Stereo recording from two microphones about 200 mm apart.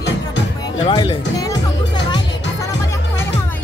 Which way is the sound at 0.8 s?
20° left (ahead or behind).